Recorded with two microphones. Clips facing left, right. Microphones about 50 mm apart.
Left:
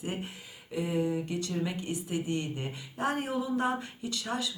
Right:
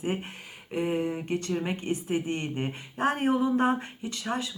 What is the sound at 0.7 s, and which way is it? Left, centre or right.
Speech, right.